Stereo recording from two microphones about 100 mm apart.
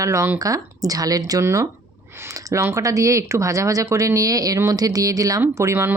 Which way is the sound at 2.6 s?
30° right (ahead or behind).